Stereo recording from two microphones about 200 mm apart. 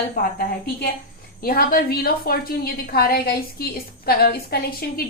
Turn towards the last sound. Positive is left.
turn(degrees=50)  # may be behind; listen again after turning